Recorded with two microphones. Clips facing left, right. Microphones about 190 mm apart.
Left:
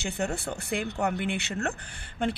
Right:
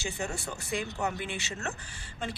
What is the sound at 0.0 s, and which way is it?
A woman's voice, 60° left (ahead or behind).